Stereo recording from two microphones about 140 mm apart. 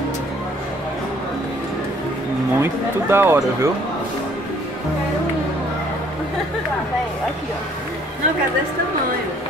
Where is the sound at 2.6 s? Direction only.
15° right (ahead or behind).